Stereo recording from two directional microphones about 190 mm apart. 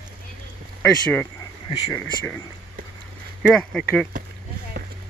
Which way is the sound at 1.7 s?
15° left (ahead or behind).